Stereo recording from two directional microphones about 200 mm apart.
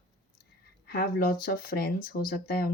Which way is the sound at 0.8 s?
50° left (ahead or behind).